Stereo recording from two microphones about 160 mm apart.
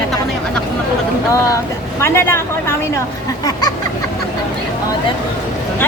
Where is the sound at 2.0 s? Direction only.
15° left (ahead or behind).